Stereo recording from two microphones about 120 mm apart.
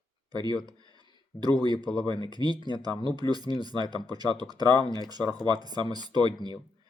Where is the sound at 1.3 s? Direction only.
35° right (ahead or behind).